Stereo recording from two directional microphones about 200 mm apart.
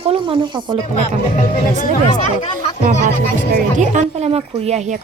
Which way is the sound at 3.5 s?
40° right (ahead or behind).